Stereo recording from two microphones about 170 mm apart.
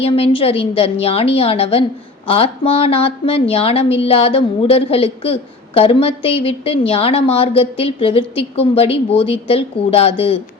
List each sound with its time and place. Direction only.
0.0 s a woman's voice: 35° left (ahead or behind)